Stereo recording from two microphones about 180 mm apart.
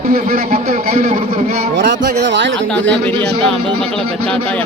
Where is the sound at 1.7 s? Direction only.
65° right (ahead or behind); by 2.6 s 80° right.